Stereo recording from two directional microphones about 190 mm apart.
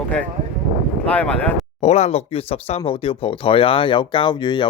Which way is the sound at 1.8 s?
35° left (ahead or behind).